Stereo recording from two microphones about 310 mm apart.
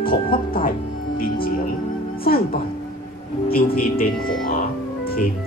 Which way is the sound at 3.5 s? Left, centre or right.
Left.